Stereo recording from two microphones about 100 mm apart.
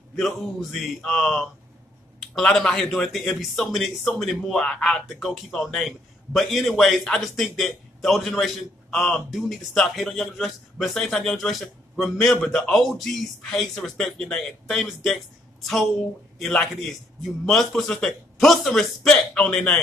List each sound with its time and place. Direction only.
0.1 s a man's voice: centre (ahead or behind)